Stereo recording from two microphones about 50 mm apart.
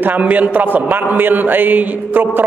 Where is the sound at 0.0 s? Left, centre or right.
Right.